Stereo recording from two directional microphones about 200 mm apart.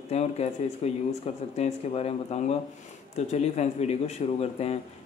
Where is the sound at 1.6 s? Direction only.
30° left (ahead or behind).